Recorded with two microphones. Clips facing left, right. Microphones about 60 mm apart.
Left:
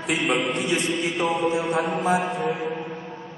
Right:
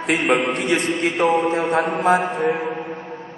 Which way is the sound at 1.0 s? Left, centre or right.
Right.